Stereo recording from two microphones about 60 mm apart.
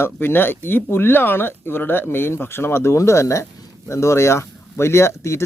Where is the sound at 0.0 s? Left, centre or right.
Left.